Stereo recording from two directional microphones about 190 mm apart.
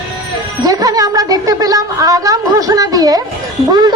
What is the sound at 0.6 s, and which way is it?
Speech, 20° right (ahead or behind).